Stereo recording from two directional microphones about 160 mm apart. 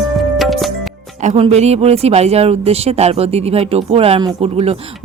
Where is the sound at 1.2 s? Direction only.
40° right (ahead or behind).